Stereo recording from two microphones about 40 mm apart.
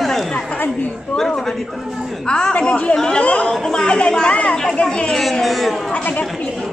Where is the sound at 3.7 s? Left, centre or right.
Left.